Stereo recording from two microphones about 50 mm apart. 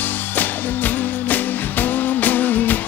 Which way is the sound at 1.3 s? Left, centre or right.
Left.